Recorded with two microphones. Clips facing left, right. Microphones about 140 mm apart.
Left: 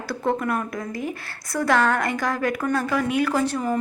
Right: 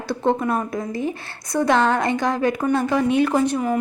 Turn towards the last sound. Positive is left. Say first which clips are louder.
# right 3 dB
turn(degrees=-15)  # may be behind; listen again after turning